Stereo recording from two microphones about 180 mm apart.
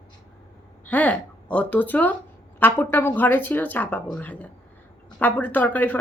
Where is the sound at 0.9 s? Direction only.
10° left (ahead or behind).